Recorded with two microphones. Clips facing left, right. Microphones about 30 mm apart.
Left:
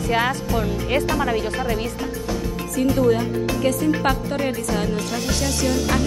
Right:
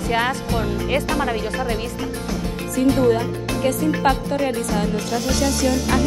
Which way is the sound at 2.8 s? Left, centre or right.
Right.